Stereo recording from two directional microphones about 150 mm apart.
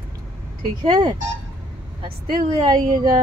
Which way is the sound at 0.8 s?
30° right (ahead or behind).